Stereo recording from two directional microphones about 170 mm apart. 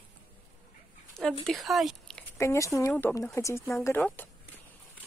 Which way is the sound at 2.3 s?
20° left (ahead or behind).